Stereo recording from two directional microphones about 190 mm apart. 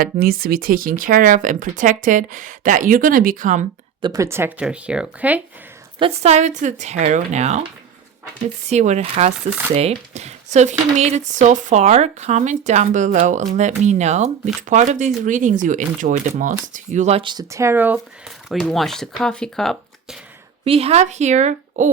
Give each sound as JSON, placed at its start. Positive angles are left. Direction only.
{"t": 0.0, "sound": "speech", "side_deg": -50}
{"t": 4.0, "sound": "speech", "side_deg": -15}
{"t": 6.0, "sound": "speech", "side_deg": -35}
{"t": 8.7, "sound": "speech", "side_deg": -35}
{"t": 20.7, "sound": "speech", "side_deg": -30}